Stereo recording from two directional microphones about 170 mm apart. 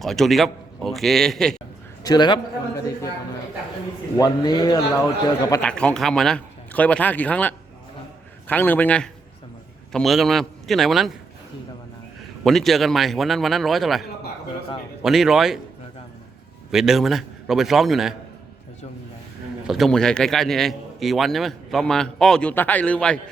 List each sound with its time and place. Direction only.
0.0 s a man's voice: centre (ahead or behind)
2.0 s a man's voice: 25° left (ahead or behind)
4.2 s a man's voice: 25° left (ahead or behind)
5.6 s a man's voice: 5° left (ahead or behind)
12.5 s a man's voice: centre (ahead or behind)
16.7 s a man's voice: centre (ahead or behind)
19.6 s a man's voice: centre (ahead or behind)